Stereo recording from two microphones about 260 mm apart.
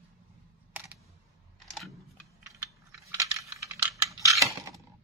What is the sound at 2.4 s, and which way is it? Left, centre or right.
Computer keyboard, centre.